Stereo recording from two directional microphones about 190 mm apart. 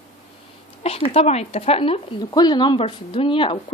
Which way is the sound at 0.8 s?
30° left (ahead or behind).